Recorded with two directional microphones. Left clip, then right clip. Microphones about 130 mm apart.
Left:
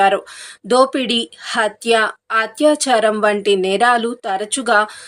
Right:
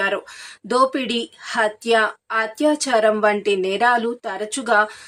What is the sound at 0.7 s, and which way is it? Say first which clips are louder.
A woman's voice: left 4 dB; 20° left (ahead or behind).